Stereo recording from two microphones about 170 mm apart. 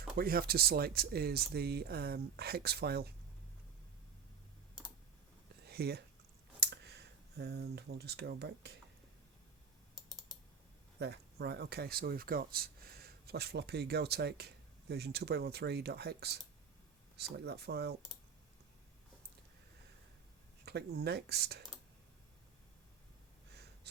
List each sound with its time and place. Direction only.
0.2 s speech: 60° right (ahead or behind)
5.6 s a sound: 70° right (ahead or behind)
6.6 s speech: 80° right
9.9 s typing: 5° left (ahead or behind)
11.0 s speech: 75° right (ahead or behind)
20.7 s speech: 70° right (ahead or behind)
23.9 s gasp: 75° right (ahead or behind)